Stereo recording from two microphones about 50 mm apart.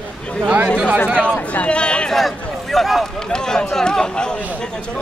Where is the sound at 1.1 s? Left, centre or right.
Left.